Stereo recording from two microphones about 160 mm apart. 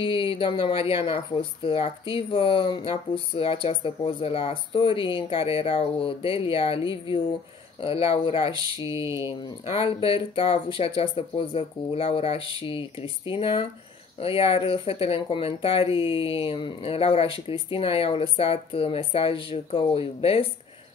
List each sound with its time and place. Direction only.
0.0 s speech: 30° left (ahead or behind)
8.5 s speech: 20° right (ahead or behind)
9.2 s speech: 35° left (ahead or behind)